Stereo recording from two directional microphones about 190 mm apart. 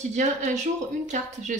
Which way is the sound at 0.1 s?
40° right (ahead or behind).